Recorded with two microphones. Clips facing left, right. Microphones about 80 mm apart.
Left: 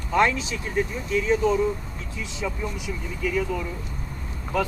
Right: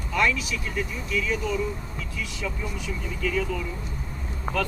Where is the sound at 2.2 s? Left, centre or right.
Left.